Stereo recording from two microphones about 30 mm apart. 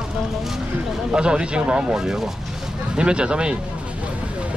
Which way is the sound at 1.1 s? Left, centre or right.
Right.